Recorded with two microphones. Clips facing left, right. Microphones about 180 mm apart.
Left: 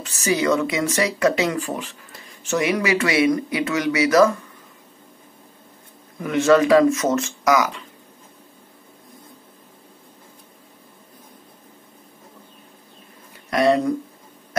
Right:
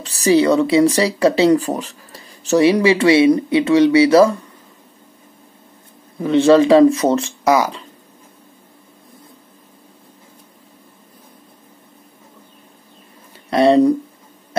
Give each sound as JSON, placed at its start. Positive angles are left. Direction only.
{"t": 0.0, "sound": "speech", "side_deg": -35}
{"t": 6.1, "sound": "speech", "side_deg": -30}
{"t": 13.5, "sound": "speech", "side_deg": -30}